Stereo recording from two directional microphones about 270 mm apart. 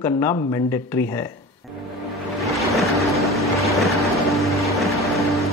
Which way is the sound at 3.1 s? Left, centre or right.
Centre.